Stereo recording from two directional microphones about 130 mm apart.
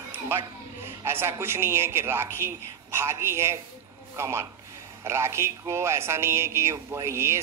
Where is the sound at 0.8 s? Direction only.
20° right (ahead or behind).